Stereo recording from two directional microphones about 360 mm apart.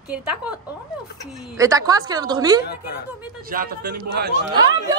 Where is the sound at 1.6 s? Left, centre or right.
Centre.